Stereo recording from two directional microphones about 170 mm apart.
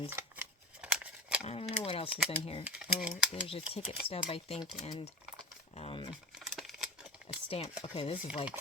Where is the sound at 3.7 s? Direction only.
35° left (ahead or behind).